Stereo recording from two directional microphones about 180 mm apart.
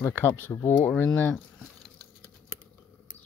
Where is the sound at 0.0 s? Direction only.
10° left (ahead or behind).